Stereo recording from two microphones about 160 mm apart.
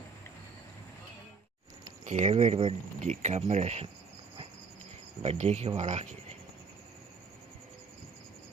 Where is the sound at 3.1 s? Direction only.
45° right (ahead or behind).